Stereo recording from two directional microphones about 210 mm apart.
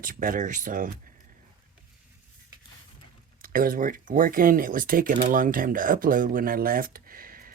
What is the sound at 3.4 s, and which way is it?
Speech, 40° right (ahead or behind).